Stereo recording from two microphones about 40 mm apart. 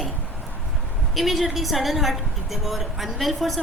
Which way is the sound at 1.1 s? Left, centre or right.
Centre.